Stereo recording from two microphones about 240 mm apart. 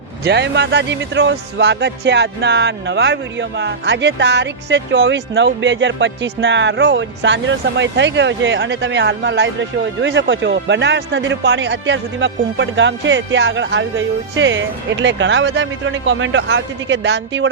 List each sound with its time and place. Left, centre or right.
0.3 s speech: right